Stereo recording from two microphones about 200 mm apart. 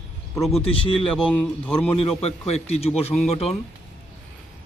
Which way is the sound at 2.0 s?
30° left (ahead or behind).